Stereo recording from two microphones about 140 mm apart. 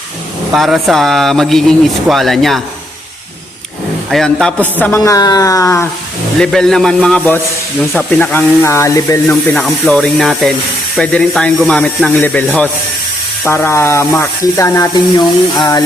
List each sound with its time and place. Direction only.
0.5 s speech: centre (ahead or behind)
4.1 s speech: 5° left (ahead or behind)
5.0 s speech: 25° left (ahead or behind)
6.4 s speech: 5° left (ahead or behind); by 15.8 s 30° left (ahead or behind)